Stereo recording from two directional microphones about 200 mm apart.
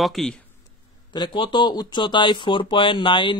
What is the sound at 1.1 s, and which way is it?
Speech, 20° left (ahead or behind).